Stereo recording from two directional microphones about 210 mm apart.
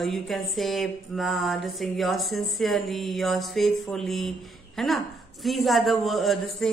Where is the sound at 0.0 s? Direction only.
Centre (ahead or behind).